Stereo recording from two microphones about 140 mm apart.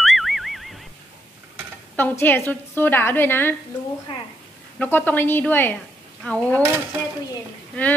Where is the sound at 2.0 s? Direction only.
15° left (ahead or behind).